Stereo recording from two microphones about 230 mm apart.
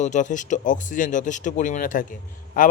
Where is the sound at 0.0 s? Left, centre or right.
Left.